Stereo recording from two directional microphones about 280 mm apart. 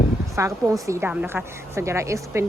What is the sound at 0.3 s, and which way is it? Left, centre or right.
A woman's voice, centre.